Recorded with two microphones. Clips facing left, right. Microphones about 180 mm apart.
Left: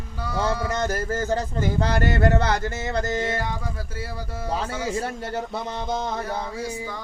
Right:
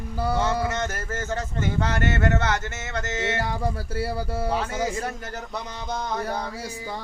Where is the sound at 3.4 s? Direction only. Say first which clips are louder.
Right 3 dB; 30° right (ahead or behind).